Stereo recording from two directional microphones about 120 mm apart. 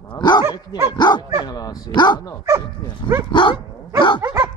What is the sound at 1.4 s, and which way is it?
Dog, 30° left (ahead or behind).